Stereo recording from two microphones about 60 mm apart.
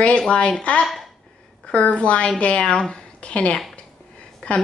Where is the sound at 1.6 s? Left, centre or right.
Left.